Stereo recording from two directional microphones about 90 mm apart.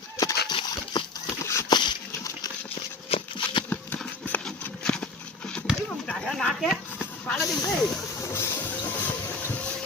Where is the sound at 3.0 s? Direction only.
80° left.